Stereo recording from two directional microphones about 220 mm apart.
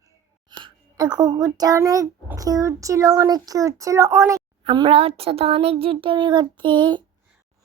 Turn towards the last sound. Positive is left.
turn(degrees=-20)  # may be behind; listen again after turning